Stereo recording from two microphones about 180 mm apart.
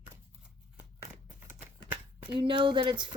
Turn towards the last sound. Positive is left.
turn(degrees=-25)  # may be behind; listen again after turning